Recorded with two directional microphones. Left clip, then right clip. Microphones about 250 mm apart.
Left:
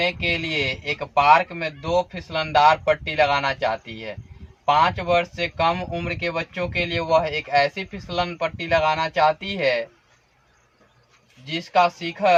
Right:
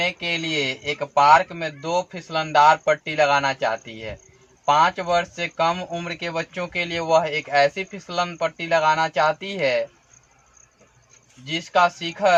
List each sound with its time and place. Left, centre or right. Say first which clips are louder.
0.0 s speech: left 1 dB; centre
11.4 s speech: even; centre